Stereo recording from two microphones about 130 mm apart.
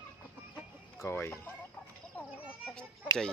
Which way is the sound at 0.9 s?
20° left (ahead or behind).